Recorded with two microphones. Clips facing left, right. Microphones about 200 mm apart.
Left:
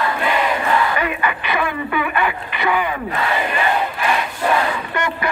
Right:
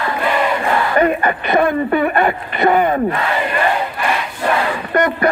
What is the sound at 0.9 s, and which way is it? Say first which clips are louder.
Radio: right 7 dB; 45° right (ahead or behind).